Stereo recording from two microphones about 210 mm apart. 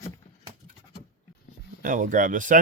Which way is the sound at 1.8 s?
40° right (ahead or behind).